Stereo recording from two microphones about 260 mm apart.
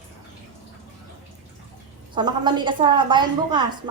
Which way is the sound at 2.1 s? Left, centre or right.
Centre.